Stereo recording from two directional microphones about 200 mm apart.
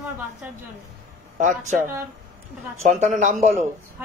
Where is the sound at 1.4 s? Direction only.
40° right (ahead or behind).